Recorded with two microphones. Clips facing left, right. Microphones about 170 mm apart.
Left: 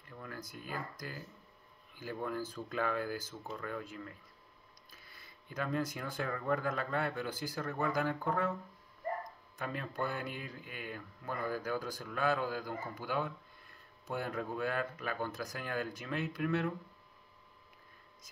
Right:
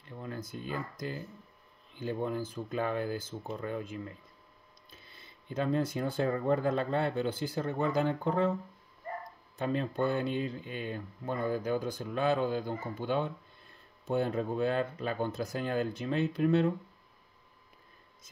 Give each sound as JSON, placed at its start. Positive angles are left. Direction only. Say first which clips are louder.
{"t": 0.1, "sound": "speech", "louder": "right 6 dB", "side_deg": -25}
{"t": 9.6, "sound": "speech", "louder": "right 7 dB", "side_deg": -25}